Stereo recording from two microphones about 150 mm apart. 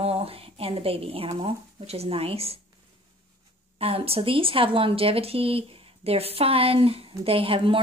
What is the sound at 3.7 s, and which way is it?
Speech, 40° right (ahead or behind).